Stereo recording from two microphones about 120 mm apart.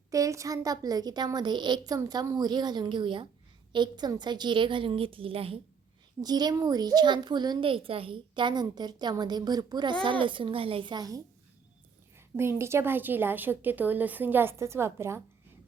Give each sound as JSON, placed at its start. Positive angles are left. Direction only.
{"t": 0.1, "sound": "speech", "side_deg": -25}
{"t": 2.0, "sound": "a woman's voice", "side_deg": -25}
{"t": 6.2, "sound": "a woman's voice", "side_deg": -35}
{"t": 12.1, "sound": "speech", "side_deg": -20}